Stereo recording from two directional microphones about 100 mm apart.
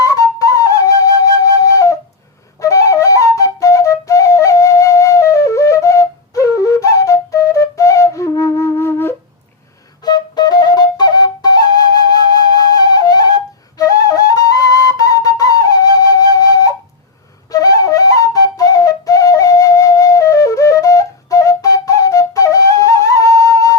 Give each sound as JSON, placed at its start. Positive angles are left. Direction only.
{"t": 0.0, "sound": "flute", "side_deg": 35}
{"t": 10.0, "sound": "flute", "side_deg": 45}